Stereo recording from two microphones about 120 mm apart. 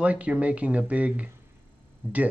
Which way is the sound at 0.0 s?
10° right (ahead or behind).